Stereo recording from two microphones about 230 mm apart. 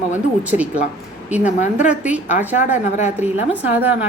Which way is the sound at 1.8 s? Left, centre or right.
Centre.